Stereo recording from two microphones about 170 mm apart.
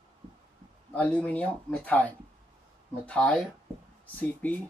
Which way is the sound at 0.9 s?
10° left (ahead or behind).